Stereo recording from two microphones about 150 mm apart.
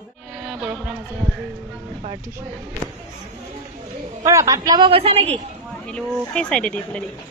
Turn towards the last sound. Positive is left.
turn(degrees=5)  # may be behind; listen again after turning